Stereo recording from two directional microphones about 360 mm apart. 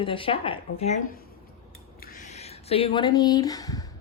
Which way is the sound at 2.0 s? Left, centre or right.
Left.